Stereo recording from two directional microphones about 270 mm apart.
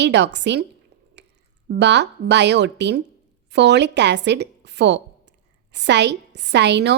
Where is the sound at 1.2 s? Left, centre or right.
Right.